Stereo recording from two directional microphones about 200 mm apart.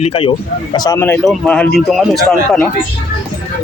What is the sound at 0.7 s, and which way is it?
Speech, 15° left (ahead or behind).